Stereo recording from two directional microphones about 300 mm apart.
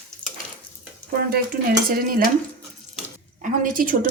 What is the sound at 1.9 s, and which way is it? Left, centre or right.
Speech, right.